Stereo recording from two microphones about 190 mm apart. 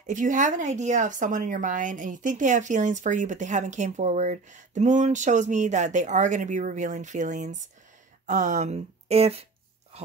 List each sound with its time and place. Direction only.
0.0 s speech: 40° right (ahead or behind)